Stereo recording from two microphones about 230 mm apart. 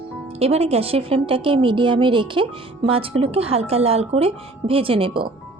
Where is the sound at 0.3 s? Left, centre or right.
Right.